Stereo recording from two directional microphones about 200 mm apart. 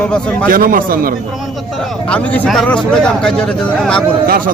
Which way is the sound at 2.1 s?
5° left (ahead or behind).